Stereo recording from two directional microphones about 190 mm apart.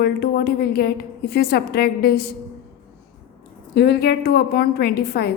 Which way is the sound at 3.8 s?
60° left (ahead or behind).